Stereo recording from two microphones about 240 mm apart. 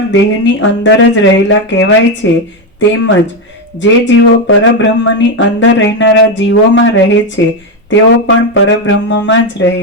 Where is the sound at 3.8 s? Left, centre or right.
Left.